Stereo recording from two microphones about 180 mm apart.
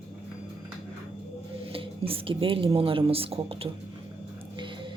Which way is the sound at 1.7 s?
30° right (ahead or behind).